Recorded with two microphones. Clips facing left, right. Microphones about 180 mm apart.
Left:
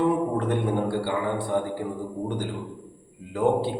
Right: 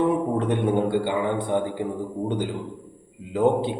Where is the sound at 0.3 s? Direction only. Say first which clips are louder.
Right 3 dB; 20° right (ahead or behind).